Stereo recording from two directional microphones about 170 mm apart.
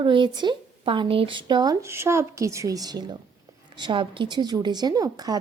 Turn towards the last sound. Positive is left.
turn(degrees=-20)  # may be behind; listen again after turning